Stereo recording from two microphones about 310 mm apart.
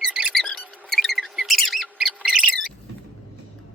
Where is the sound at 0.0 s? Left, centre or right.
Centre.